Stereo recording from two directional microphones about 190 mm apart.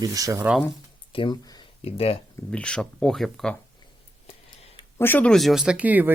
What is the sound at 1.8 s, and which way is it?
Speech, 30° left (ahead or behind).